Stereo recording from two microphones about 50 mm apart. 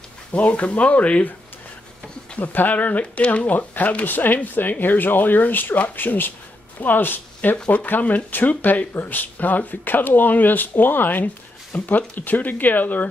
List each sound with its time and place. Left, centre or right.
0.3 s speech: left
2.3 s speech: left
7.5 s speech: left